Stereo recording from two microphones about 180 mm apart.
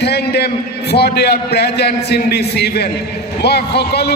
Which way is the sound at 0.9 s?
65° left (ahead or behind).